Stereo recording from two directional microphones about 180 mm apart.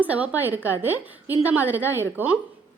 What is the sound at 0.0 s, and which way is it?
A woman's voice, 10° right (ahead or behind).